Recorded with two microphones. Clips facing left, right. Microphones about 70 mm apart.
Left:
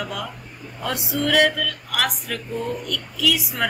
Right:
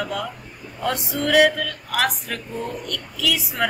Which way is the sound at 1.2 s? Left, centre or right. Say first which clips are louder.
Right 2 dB; centre.